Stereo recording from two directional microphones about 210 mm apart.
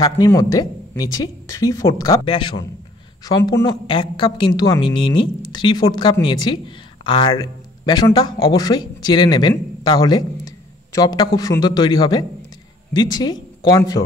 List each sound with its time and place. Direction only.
0.0 s a woman's voice: 15° left (ahead or behind)